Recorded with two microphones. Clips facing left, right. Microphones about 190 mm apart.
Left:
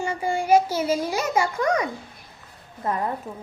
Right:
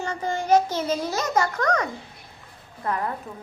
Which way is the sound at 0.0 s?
10° left (ahead or behind).